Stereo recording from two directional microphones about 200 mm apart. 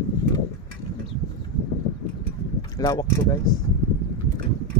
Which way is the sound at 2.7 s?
20° left (ahead or behind).